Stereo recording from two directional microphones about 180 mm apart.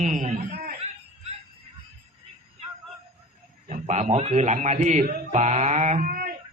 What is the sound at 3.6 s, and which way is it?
Speech, 40° right (ahead or behind).